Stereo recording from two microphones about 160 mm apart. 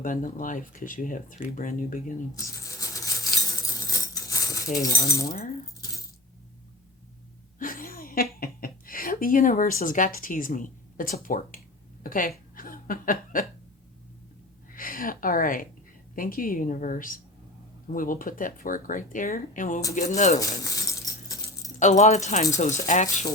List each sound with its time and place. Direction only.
0.0 s speech: 55° left (ahead or behind)
3.8 s coin: 20° left (ahead or behind)
4.8 s speech: 20° left (ahead or behind)
7.6 s a woman's voice: 60° left (ahead or behind)
12.5 s chuckle: 60° left (ahead or behind)
14.7 s speech: 60° left (ahead or behind)
20.4 s keys jangling: 20° left (ahead or behind)
21.8 s speech: 50° left (ahead or behind)